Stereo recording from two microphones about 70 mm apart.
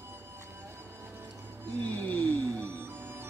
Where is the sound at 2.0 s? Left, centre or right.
Left.